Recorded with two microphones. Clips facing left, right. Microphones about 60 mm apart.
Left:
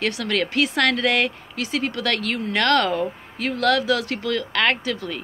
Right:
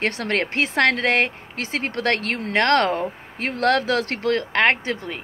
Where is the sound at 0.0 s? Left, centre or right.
Right.